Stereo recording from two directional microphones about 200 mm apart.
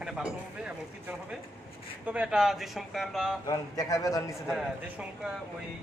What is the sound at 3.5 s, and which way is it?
Speech, 15° left (ahead or behind).